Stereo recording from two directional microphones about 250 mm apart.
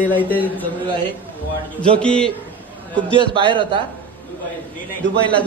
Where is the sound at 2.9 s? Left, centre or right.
Centre.